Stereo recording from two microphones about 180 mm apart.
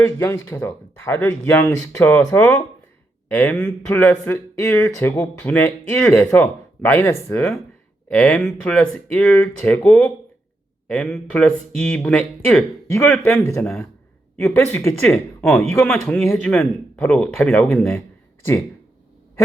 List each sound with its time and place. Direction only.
0.0 s speech: 10° left (ahead or behind)